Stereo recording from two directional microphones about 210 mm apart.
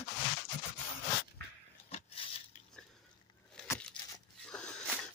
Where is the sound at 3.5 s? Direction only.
10° left (ahead or behind).